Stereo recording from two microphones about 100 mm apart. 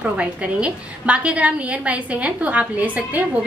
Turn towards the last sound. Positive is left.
turn(degrees=-15)  # may be behind; listen again after turning